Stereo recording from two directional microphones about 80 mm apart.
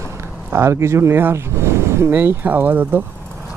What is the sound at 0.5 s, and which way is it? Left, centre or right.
Speech, right.